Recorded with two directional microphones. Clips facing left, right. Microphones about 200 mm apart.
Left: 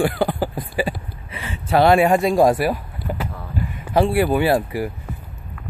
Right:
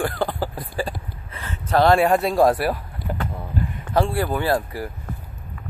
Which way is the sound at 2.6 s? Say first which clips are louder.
Left 2 dB; centre (ahead or behind).